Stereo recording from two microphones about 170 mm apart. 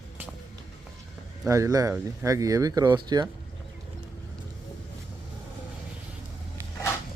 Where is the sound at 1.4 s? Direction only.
20° right (ahead or behind).